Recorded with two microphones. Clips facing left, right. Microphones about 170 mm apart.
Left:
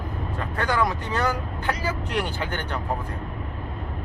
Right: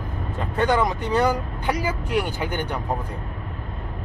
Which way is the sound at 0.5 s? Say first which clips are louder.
Right 4 dB; 20° right (ahead or behind).